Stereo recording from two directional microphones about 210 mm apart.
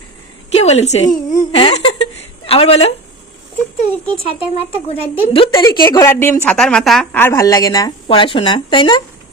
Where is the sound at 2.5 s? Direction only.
25° left (ahead or behind).